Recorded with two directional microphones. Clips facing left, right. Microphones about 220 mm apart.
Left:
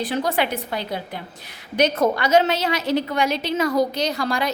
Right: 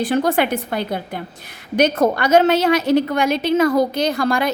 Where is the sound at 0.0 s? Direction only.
50° right (ahead or behind).